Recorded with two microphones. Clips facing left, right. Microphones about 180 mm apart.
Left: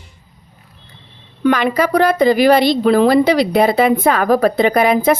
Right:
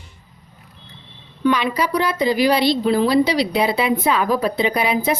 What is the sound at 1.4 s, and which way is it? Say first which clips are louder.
Speech: left 4 dB; 55° left (ahead or behind).